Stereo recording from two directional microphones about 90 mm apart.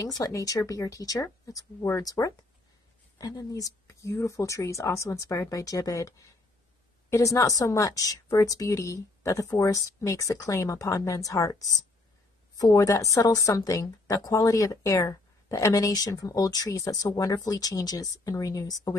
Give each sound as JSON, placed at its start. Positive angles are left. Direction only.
{"t": 0.0, "sound": "speech", "side_deg": 40}